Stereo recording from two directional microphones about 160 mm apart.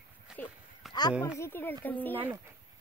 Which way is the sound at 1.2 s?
15° left (ahead or behind).